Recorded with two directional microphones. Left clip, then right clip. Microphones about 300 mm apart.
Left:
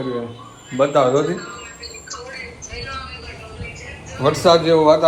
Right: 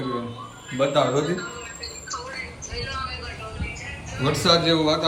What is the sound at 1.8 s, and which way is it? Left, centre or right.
Music, centre.